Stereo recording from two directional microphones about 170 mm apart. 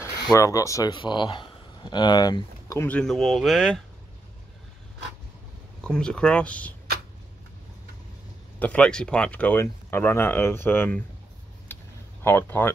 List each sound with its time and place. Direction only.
0.0 s speech: 20° left (ahead or behind)
3.0 s speech: centre (ahead or behind)
5.8 s speech: 5° left (ahead or behind)
8.5 s speech: 10° left (ahead or behind)
11.7 s a sound: 15° left (ahead or behind)